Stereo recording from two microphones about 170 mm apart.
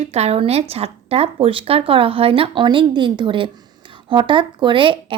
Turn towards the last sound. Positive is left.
turn(degrees=-30)  # may be behind; listen again after turning